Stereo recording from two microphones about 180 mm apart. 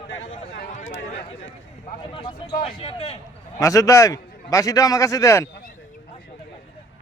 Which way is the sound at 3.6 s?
20° left (ahead or behind).